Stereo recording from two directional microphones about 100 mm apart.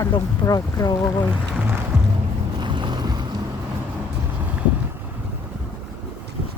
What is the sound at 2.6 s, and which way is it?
Boat, 50° right (ahead or behind).